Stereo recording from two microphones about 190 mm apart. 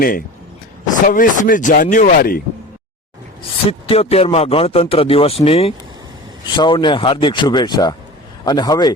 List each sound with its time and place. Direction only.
0.0 s speech: 50° left (ahead or behind)
3.7 s speech: 30° left (ahead or behind)